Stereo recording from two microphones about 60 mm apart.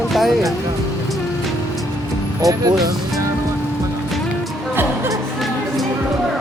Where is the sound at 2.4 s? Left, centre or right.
Right.